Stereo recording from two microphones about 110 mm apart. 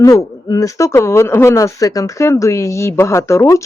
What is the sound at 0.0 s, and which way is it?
Speech, 30° left (ahead or behind).